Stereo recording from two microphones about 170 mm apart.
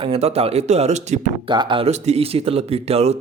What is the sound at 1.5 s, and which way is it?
Speech, 25° right (ahead or behind).